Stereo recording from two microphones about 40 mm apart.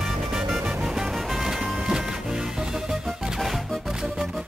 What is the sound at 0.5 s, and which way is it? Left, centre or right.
Music, centre.